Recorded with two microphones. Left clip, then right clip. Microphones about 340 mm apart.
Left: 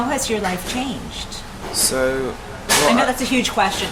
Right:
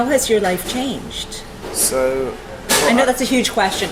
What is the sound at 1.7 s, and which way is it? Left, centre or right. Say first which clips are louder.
Speech: right 1 dB; left.